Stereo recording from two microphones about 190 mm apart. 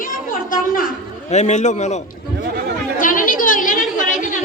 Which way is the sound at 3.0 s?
45° left (ahead or behind).